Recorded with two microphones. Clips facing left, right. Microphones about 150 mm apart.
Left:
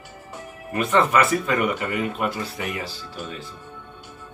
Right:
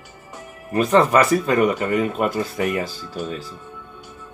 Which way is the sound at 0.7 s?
35° right (ahead or behind).